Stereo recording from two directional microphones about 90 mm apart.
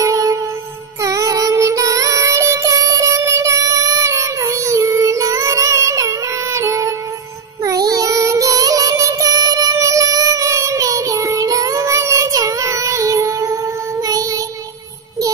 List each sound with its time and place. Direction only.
0.0 s music: 35° right (ahead or behind)
1.0 s child singing: 35° right (ahead or behind)
7.6 s music: 40° right (ahead or behind)
14.0 s child singing: 45° right (ahead or behind)